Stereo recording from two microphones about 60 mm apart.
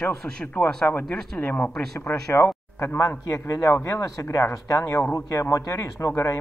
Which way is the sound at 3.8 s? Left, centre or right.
Left.